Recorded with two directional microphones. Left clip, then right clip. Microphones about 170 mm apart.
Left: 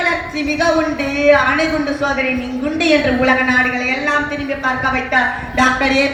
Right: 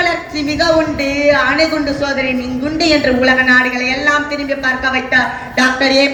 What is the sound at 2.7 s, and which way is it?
Speech, 30° right (ahead or behind).